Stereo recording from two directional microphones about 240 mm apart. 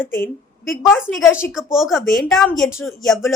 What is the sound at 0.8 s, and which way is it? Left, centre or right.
A woman's voice, centre.